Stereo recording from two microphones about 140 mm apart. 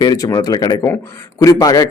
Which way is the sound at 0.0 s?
30° left (ahead or behind).